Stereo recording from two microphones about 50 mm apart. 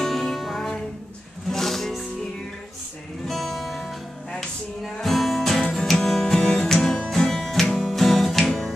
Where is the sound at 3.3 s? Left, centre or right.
Centre.